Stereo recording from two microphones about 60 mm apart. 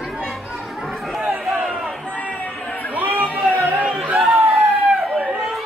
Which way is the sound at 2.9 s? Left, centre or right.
Right.